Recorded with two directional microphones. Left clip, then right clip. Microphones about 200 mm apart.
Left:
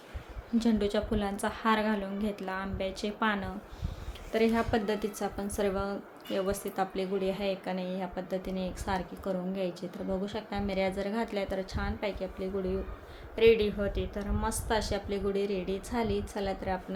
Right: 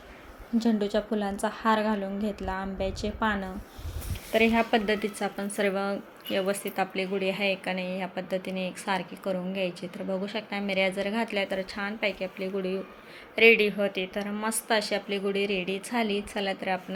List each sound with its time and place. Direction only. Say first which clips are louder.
0.6 s a woman's voice: right 2 dB; centre (ahead or behind)